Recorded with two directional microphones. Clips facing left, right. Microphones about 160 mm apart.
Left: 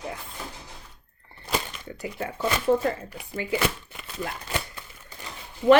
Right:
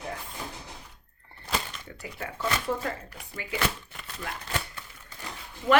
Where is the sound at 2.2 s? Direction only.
25° left (ahead or behind).